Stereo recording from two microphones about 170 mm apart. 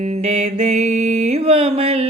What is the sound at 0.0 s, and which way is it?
Mantra, 40° right (ahead or behind).